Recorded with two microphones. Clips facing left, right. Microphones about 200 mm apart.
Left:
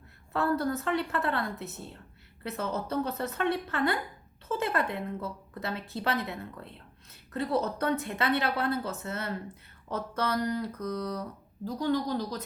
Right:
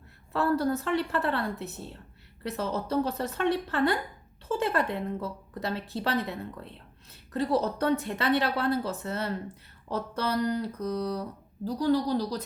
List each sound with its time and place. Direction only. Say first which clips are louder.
0.3 s speech: right 2 dB; 30° right (ahead or behind)
2.9 s speech: right 3 dB; 30° right (ahead or behind)
7.3 s speech: right 2 dB; 30° right (ahead or behind)